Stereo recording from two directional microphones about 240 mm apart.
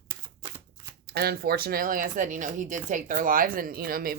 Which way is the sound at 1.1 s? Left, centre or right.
Right.